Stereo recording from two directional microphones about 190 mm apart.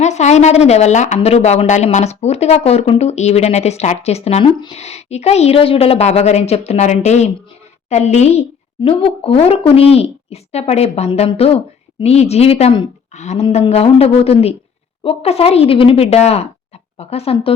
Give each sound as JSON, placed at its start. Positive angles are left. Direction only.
{"t": 0.0, "sound": "speech", "side_deg": 35}